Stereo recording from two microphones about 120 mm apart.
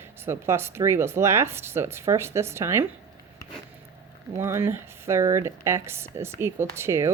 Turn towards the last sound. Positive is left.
turn(degrees=-25)  # may be behind; listen again after turning